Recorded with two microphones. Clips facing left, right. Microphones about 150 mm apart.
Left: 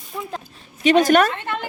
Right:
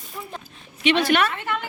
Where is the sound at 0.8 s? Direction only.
40° left (ahead or behind).